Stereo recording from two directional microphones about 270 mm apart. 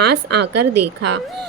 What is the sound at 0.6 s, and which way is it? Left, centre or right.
Speech, right.